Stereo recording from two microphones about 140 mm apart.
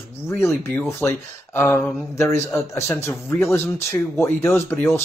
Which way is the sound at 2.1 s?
20° left (ahead or behind).